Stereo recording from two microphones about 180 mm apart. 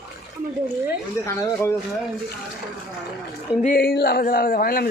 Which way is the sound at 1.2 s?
15° left (ahead or behind).